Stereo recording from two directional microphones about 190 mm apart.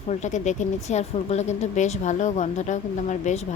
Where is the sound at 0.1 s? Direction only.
40° left (ahead or behind).